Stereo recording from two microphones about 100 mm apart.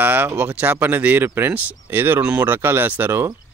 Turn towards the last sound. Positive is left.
turn(degrees=-20)  # may be behind; listen again after turning